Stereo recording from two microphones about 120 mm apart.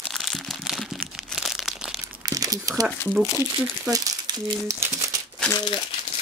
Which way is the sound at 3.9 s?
30° right (ahead or behind).